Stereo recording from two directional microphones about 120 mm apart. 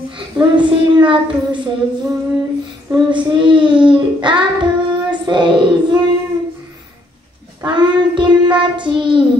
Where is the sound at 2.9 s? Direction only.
40° right (ahead or behind).